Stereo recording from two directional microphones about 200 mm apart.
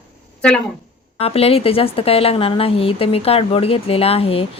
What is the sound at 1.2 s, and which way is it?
A woman's voice, 30° left (ahead or behind).